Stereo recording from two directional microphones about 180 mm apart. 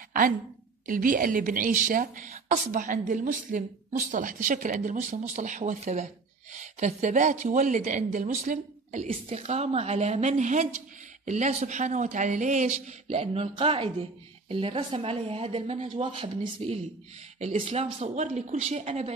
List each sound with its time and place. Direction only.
0.8 s a woman's voice: 50° right (ahead or behind)